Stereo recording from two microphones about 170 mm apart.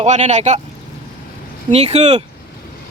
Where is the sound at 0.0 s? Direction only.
45° right (ahead or behind).